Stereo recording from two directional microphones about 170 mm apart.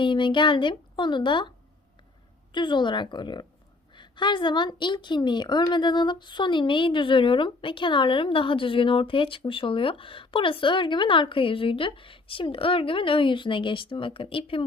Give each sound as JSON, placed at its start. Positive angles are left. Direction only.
{"t": 0.0, "sound": "a woman's voice", "side_deg": 30}